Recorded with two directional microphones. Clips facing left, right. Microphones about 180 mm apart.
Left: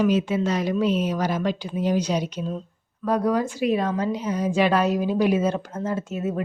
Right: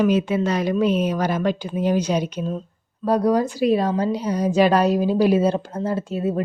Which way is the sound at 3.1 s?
35° right (ahead or behind).